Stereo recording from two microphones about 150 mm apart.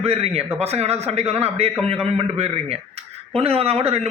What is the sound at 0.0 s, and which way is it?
A man's voice, 45° right (ahead or behind).